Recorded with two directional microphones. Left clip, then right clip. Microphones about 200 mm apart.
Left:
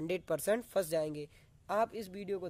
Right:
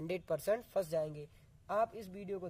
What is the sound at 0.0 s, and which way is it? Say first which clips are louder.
Speech: left 2 dB; 25° left (ahead or behind).